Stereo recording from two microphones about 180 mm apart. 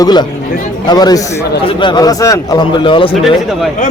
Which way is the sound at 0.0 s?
25° left (ahead or behind).